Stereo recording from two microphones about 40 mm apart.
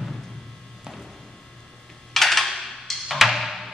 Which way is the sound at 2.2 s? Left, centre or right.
Centre.